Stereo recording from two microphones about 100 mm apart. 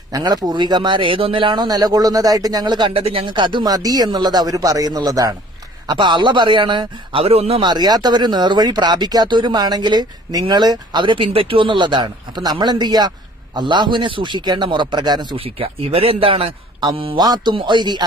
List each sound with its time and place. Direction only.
0.1 s speech: 40° right (ahead or behind)
2.9 s speech: 70° right (ahead or behind); by 5.3 s 40° right (ahead or behind)
5.9 s speech: 50° right (ahead or behind); by 7.6 s 80° right
7.6 s speech: 45° right (ahead or behind)
15.3 s a man's voice: 70° right (ahead or behind)
17.2 s speech: 40° right (ahead or behind)